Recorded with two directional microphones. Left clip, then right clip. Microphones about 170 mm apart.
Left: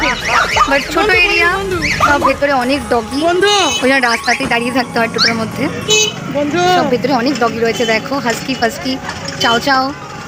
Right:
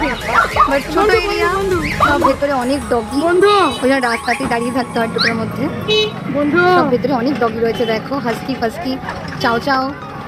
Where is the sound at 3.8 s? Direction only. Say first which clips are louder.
Left 3 dB; centre (ahead or behind).